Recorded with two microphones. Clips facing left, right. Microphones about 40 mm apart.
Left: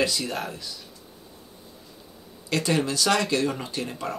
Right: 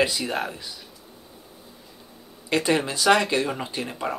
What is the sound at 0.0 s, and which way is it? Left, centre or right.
Speech, centre.